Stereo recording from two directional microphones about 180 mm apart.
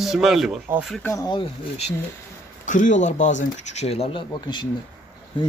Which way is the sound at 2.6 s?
45° left (ahead or behind).